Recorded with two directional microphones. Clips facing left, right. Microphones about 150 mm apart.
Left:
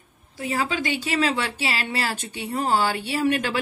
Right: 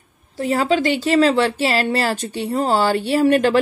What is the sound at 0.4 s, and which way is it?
A woman's voice, 40° right (ahead or behind).